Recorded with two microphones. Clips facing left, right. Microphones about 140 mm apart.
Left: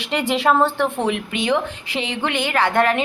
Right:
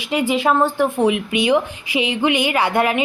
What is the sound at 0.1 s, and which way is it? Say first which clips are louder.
Speech: right 1 dB; 5° right (ahead or behind).